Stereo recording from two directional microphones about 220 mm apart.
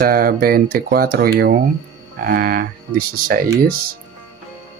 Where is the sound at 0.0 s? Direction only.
40° right (ahead or behind).